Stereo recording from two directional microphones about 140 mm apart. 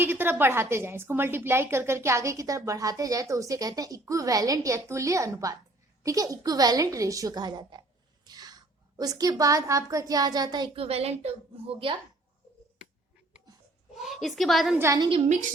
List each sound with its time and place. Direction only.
0.0 s a woman's voice: 15° right (ahead or behind); by 10.7 s 30° right (ahead or behind)
10.8 s a woman's voice: 45° right (ahead or behind)
14.0 s a woman's voice: centre (ahead or behind)
14.8 s a woman's voice: 20° right (ahead or behind)